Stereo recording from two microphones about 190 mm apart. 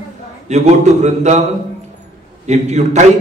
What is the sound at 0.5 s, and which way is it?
Speech, 35° right (ahead or behind).